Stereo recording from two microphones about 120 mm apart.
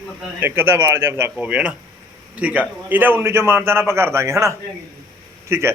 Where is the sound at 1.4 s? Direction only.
10° right (ahead or behind).